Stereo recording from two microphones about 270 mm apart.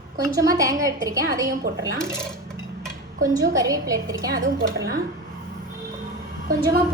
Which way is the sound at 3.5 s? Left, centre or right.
Centre.